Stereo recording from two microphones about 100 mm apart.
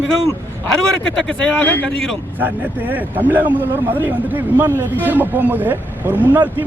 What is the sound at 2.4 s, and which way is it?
A man's voice, 15° right (ahead or behind).